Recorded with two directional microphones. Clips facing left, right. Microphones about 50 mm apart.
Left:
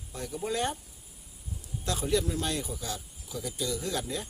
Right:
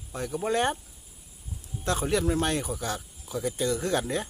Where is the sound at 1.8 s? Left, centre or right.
Right.